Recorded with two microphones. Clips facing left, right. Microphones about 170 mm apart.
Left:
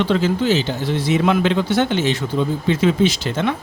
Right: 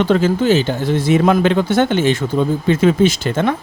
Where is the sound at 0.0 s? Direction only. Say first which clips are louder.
Right 3 dB; 50° right (ahead or behind).